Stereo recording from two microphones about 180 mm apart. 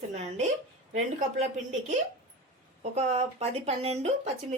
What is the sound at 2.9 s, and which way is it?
Speech, 35° right (ahead or behind).